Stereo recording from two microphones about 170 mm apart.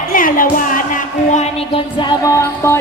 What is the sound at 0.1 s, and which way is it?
Music, 55° left (ahead or behind).